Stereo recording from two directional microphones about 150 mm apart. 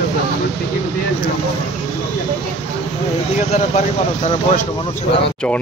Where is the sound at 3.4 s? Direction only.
50° left (ahead or behind).